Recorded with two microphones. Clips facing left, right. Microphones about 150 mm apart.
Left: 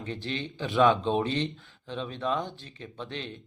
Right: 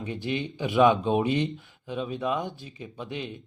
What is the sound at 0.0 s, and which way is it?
Speech, 15° right (ahead or behind).